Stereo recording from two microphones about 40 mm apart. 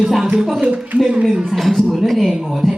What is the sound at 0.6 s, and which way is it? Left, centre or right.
Speech, right.